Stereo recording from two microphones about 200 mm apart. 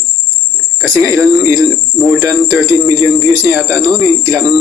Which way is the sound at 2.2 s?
20° right (ahead or behind).